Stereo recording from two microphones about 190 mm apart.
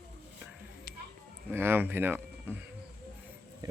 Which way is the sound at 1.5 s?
10° right (ahead or behind).